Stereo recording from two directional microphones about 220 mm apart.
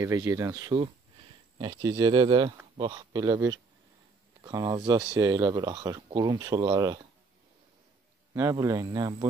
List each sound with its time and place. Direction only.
0.0 s speech: 15° right (ahead or behind)
8.3 s speech: 15° right (ahead or behind)